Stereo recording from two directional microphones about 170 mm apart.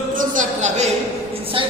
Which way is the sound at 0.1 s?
50° right (ahead or behind).